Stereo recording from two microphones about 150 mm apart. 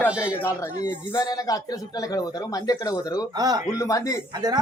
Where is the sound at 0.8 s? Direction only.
25° left (ahead or behind).